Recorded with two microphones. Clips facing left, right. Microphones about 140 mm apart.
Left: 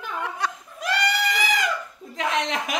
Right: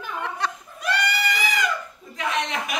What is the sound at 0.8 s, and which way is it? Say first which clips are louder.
Goat: left 1 dB; 90° left.